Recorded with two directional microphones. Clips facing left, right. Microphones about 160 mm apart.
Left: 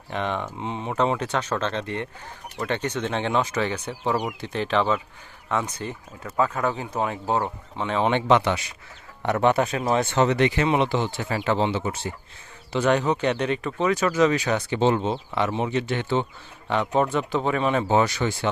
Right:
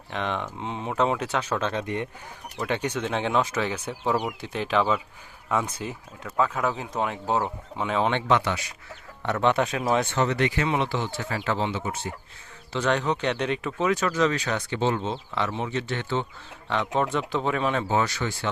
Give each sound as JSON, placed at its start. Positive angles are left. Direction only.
{"t": 0.1, "sound": "speech", "side_deg": 0}
{"t": 8.1, "sound": "speech", "side_deg": 20}
{"t": 9.2, "sound": "speech", "side_deg": 10}
{"t": 10.2, "sound": "speech", "side_deg": 20}
{"t": 12.7, "sound": "speech", "side_deg": 10}
{"t": 14.8, "sound": "speech", "side_deg": 25}
{"t": 17.8, "sound": "speech", "side_deg": 20}